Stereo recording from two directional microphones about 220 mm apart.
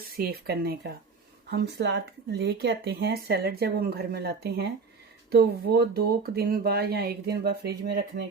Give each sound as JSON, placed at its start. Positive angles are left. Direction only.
{"t": 0.0, "sound": "speech", "side_deg": -45}